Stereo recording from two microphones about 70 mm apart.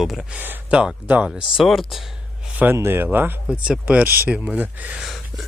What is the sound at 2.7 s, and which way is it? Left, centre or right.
Speech, right.